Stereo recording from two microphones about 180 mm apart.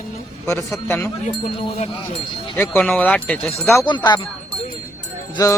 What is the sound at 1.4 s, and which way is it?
Speech, 35° left (ahead or behind).